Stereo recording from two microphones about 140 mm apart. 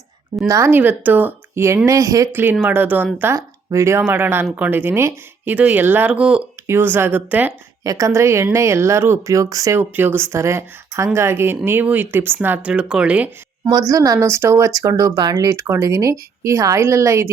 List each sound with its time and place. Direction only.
0.4 s speech: 20° right (ahead or behind)
7.9 s speech: 20° right (ahead or behind)
13.7 s speech: 25° right (ahead or behind)